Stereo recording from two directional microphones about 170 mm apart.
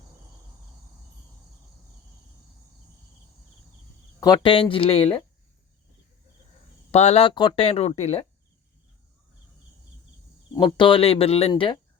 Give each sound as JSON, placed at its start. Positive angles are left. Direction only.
{"t": 4.2, "sound": "speech", "side_deg": 25}
{"t": 6.9, "sound": "speech", "side_deg": 40}
{"t": 10.5, "sound": "speech", "side_deg": 25}